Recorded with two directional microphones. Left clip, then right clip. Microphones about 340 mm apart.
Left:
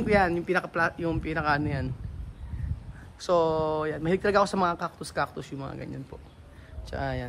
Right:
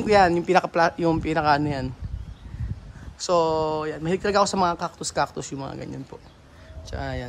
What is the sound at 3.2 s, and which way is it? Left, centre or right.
Speech, centre.